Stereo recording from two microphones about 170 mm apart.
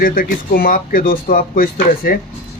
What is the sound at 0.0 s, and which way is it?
Speech, 55° left (ahead or behind).